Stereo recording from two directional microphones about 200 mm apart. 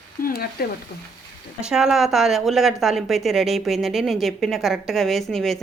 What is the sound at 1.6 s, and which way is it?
A woman's voice, centre (ahead or behind).